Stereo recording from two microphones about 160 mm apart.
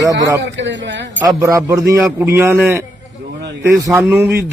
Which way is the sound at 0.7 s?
90° right.